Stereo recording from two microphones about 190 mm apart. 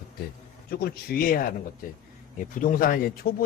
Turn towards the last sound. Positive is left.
turn(degrees=50)  # may be behind; listen again after turning